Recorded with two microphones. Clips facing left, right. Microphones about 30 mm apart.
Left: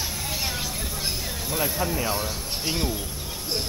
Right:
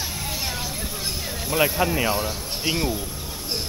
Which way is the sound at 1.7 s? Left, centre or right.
Right.